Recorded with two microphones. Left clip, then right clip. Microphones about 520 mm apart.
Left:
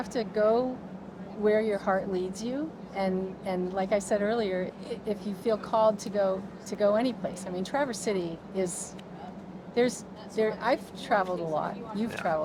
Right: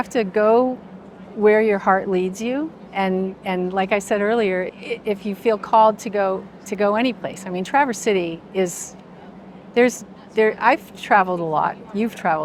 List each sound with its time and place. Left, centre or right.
0.0 s a woman's voice: right
9.7 s a woman's voice: right